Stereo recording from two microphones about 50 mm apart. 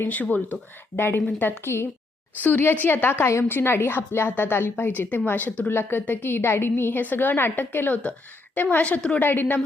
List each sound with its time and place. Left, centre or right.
0.1 s a woman's voice: left
0.9 s a woman's voice: left
2.4 s a woman's voice: left
7.0 s a woman's voice: left
8.7 s a woman's voice: left
9.2 s a woman's voice: left